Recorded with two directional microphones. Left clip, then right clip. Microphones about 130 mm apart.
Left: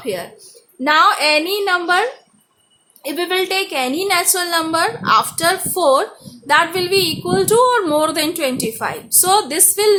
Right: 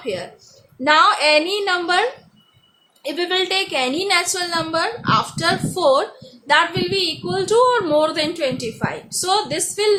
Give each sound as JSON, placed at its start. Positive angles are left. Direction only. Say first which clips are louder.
{"t": 0.0, "sound": "a woman's voice", "louder": "left 2 dB", "side_deg": 25}